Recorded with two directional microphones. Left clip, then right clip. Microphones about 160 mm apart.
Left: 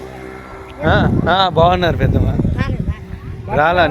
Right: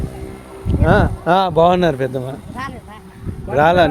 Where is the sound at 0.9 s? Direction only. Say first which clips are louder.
Even; 35° right (ahead or behind); by 2.2 s 55° right (ahead or behind).